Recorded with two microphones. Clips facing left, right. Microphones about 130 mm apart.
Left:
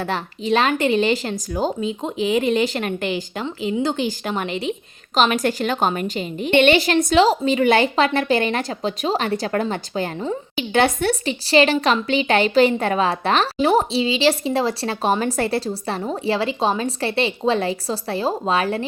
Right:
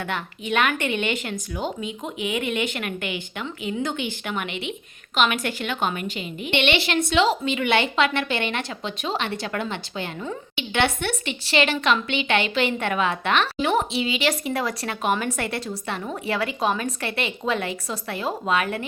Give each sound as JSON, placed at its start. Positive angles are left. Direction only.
{"t": 0.0, "sound": "a woman's voice", "side_deg": 35}